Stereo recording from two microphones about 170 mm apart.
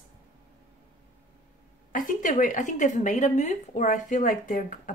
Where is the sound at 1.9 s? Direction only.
50° left (ahead or behind).